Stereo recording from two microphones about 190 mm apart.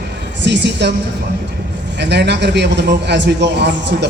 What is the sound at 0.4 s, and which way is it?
Speech, 65° right (ahead or behind).